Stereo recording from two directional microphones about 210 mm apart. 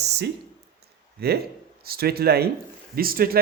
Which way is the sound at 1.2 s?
50° right (ahead or behind).